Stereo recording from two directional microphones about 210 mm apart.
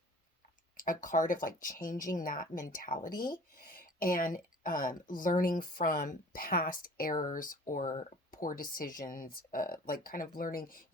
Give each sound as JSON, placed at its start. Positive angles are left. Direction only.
{"t": 0.8, "sound": "speech", "side_deg": 40}